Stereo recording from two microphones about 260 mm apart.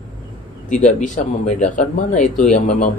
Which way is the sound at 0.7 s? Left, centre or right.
Left.